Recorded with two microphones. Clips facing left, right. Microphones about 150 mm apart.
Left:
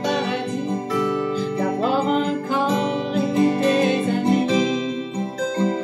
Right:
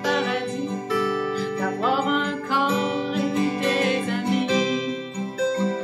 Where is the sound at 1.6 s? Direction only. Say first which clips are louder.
Left 3 dB; 25° left (ahead or behind).